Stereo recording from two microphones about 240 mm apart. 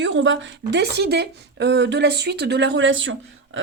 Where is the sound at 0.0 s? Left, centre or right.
Right.